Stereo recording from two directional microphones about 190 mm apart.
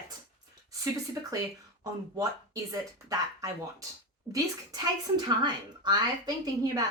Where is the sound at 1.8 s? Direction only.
20° right (ahead or behind).